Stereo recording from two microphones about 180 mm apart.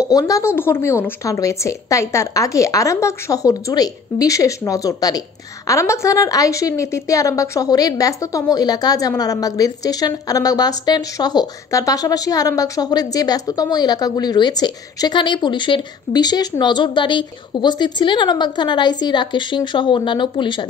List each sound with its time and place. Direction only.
0.1 s a woman's voice: 20° left (ahead or behind)